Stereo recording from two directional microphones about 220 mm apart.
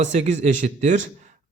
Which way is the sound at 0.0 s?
30° right (ahead or behind).